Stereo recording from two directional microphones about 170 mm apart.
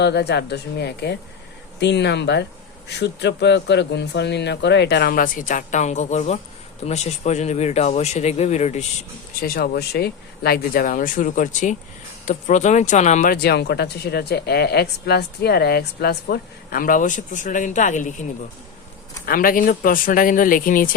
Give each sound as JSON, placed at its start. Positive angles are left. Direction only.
{"t": 0.0, "sound": "speech", "side_deg": 75}
{"t": 1.8, "sound": "a man's voice", "side_deg": 90}
{"t": 9.3, "sound": "speech", "side_deg": 60}
{"t": 13.3, "sound": "speech", "side_deg": 70}
{"t": 19.2, "sound": "speech", "side_deg": 55}